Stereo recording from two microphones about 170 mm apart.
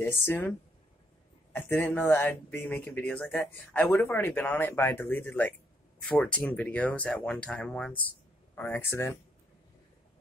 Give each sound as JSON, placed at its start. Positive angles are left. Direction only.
{"t": 0.0, "sound": "speech", "side_deg": 15}